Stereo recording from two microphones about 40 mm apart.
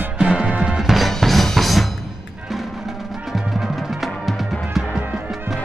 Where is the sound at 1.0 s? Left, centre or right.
Centre.